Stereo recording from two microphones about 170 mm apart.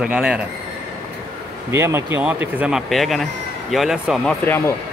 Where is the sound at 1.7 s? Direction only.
15° right (ahead or behind); by 4.6 s 5° left (ahead or behind).